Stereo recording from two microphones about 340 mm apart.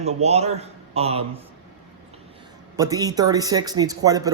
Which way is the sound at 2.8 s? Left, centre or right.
Centre.